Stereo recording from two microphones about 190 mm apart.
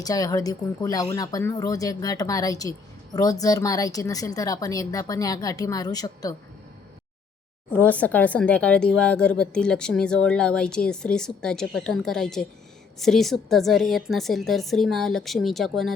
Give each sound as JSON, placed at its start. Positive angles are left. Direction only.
{"t": 0.0, "sound": "speech", "side_deg": 20}
{"t": 7.7, "sound": "speech", "side_deg": 10}